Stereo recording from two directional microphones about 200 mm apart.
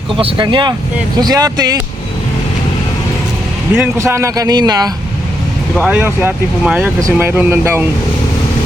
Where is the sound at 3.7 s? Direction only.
10° right (ahead or behind).